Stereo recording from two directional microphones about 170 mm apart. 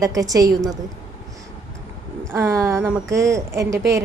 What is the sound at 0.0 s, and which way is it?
Speech, 20° right (ahead or behind).